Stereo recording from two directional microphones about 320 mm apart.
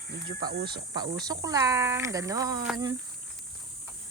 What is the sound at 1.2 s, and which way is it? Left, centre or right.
Speech, centre.